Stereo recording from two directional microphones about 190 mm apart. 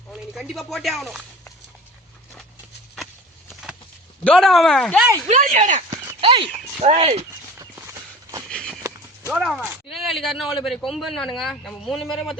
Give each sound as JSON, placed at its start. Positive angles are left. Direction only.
{"t": 0.1, "sound": "a man's voice", "side_deg": 0}
{"t": 3.5, "sound": "a sound", "side_deg": 0}
{"t": 4.2, "sound": "a man's voice", "side_deg": 5}
{"t": 5.3, "sound": "speech", "side_deg": -40}
{"t": 6.1, "sound": "speech", "side_deg": -30}
{"t": 6.8, "sound": "clip-clop", "side_deg": -35}
{"t": 8.4, "sound": "a sound", "side_deg": 5}
{"t": 9.3, "sound": "a man's voice", "side_deg": 0}